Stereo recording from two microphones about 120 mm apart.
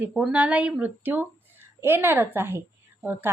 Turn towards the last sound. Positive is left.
turn(degrees=-15)  # may be behind; listen again after turning